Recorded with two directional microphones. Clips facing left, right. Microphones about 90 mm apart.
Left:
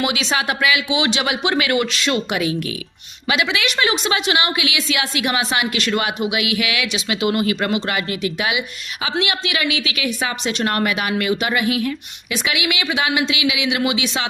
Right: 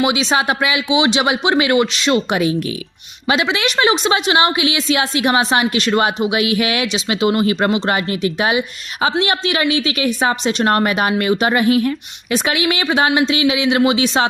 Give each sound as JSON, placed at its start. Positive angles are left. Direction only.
{"t": 0.0, "sound": "a woman's voice", "side_deg": -25}